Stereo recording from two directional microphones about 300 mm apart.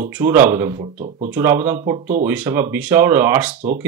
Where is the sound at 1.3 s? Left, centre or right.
Centre.